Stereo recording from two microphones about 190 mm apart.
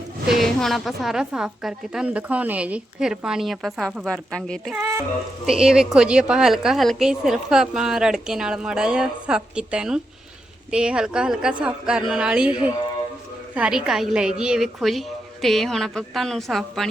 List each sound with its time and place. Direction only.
0.3 s a woman's voice: centre (ahead or behind)
4.7 s a woman's voice: 15° right (ahead or behind)